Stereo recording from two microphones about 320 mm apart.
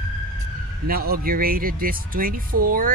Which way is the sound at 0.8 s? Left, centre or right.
Right.